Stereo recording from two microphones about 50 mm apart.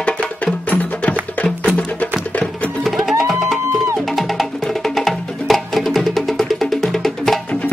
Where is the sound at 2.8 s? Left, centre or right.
Centre.